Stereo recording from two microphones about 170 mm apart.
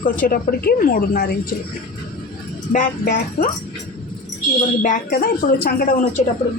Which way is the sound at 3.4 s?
50° left (ahead or behind).